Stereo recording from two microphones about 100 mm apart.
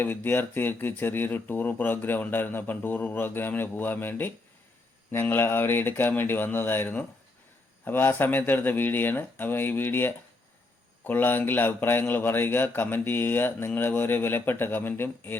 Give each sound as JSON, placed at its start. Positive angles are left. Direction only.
{"t": 0.0, "sound": "a man's voice", "side_deg": 20}